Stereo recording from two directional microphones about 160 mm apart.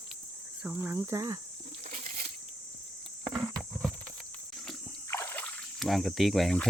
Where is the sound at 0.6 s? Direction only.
10° right (ahead or behind).